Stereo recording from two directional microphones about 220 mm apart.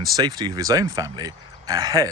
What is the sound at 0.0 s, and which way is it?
Speech, 20° right (ahead or behind).